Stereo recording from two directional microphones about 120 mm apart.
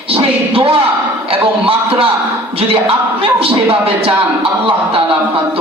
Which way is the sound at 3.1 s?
50° right (ahead or behind).